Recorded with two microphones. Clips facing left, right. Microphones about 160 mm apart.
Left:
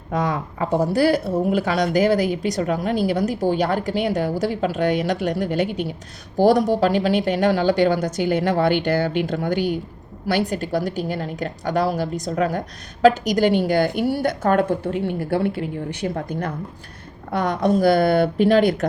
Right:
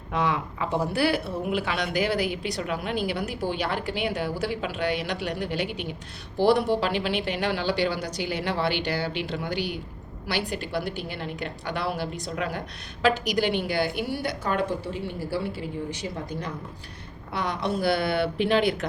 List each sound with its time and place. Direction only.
0.1 s a woman's voice: 45° left (ahead or behind)